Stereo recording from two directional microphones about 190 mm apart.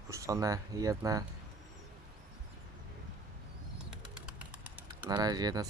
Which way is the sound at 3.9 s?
5° right (ahead or behind).